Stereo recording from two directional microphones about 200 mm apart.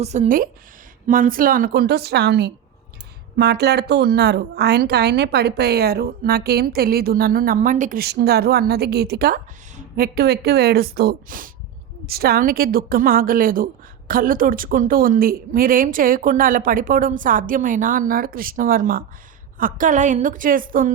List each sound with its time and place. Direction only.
0.0 s a woman's voice: 35° right (ahead or behind)